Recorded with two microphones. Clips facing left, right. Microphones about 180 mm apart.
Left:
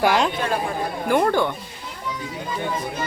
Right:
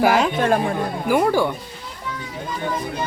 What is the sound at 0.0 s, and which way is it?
Speech, 5° right (ahead or behind).